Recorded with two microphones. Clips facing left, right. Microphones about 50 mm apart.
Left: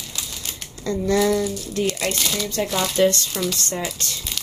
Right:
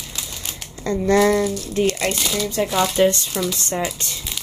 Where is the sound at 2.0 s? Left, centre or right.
Centre; by 3.3 s right.